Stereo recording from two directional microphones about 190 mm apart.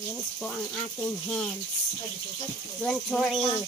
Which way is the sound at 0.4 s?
5° left (ahead or behind).